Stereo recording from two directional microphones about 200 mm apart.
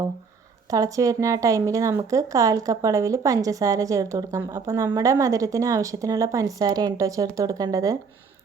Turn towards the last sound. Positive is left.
turn(degrees=-15)  # may be behind; listen again after turning